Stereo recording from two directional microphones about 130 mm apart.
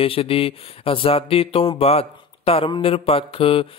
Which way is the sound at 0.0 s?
45° left (ahead or behind).